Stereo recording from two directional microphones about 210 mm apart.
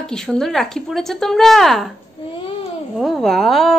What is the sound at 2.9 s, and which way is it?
Speech, centre (ahead or behind).